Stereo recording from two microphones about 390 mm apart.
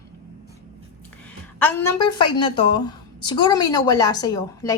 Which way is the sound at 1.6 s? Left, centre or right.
Centre.